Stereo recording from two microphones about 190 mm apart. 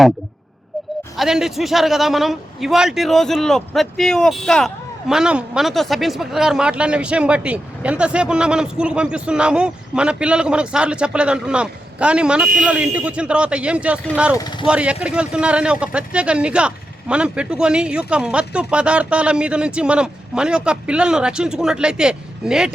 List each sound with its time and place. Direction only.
1.1 s a man's voice: centre (ahead or behind)
14.3 s speech: 20° left (ahead or behind)
14.7 s a man's voice: 5° right (ahead or behind)